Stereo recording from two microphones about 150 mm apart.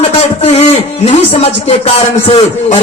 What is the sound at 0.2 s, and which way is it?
Speech, 45° left (ahead or behind).